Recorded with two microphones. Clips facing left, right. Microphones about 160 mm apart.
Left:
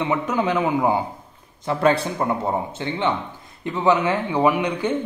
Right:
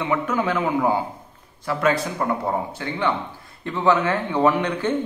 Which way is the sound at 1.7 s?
30° left (ahead or behind).